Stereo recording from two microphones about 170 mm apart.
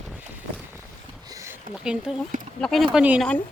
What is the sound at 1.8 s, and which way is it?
Speech, 5° right (ahead or behind).